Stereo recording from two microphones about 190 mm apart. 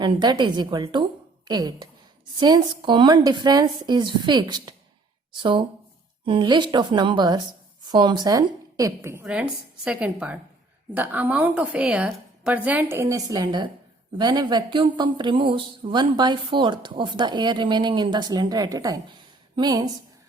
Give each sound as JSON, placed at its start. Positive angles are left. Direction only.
{"t": 0.0, "sound": "a woman's voice", "side_deg": -25}